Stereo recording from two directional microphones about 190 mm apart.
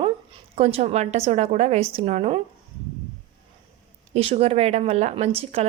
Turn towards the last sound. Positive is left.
turn(degrees=-30)  # may be behind; listen again after turning